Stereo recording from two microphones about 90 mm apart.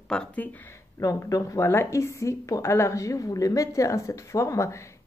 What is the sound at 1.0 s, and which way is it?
Speech, 40° left (ahead or behind).